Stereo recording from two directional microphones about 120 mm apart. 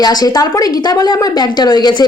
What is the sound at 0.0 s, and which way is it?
Speech, 35° left (ahead or behind).